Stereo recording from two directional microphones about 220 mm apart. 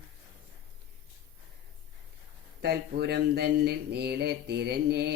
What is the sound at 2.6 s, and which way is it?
Speech, 45° right (ahead or behind).